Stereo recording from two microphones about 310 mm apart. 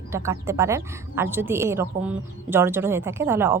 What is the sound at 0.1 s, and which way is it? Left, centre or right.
A woman's voice, centre.